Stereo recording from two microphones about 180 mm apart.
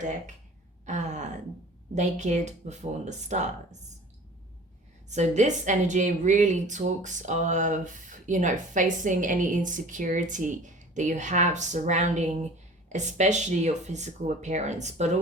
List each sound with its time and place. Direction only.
0.9 s speech: 40° right (ahead or behind)
5.0 s a woman's voice: 40° right (ahead or behind)